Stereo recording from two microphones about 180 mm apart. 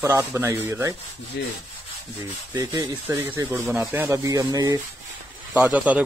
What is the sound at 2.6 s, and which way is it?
Speech, 20° right (ahead or behind).